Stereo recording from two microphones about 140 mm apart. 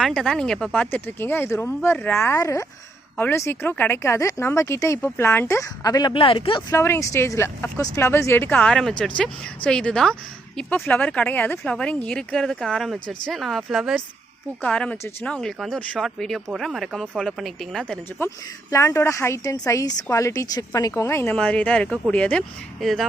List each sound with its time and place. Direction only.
0.0 s a woman's voice: centre (ahead or behind); by 6.6 s 40° left (ahead or behind)
6.7 s a woman's voice: 20° left (ahead or behind)
8.5 s speech: 5° left (ahead or behind)
14.6 s speech: 10° left (ahead or behind)
18.7 s a woman's voice: 20° left (ahead or behind); by 23.0 s centre (ahead or behind)